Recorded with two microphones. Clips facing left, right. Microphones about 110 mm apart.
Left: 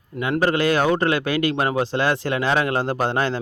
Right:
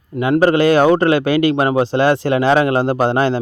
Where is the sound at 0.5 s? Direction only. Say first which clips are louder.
Right 7 dB; 25° right (ahead or behind).